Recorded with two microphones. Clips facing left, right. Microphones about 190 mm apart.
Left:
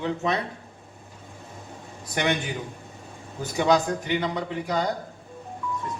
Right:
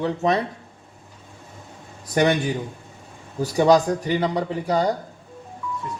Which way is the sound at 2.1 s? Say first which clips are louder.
Right 7 dB; 40° right (ahead or behind).